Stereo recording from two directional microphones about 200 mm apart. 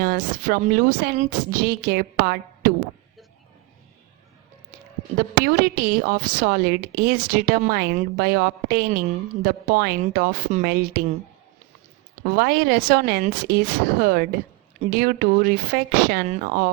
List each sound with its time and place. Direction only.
0.0 s speech: 45° right (ahead or behind)
5.4 s speech: 50° right (ahead or behind)
12.2 s speech: 50° right (ahead or behind)